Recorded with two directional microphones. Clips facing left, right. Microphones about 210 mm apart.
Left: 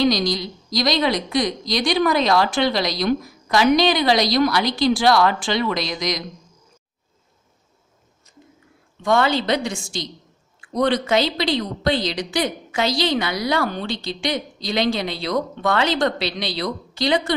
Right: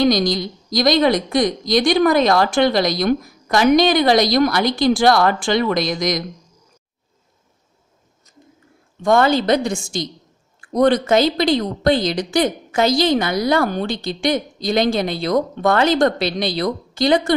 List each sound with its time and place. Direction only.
0.0 s speech: 50° right (ahead or behind)
9.0 s speech: 45° right (ahead or behind)